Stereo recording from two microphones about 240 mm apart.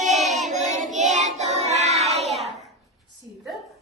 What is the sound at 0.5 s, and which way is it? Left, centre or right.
Child singing, right.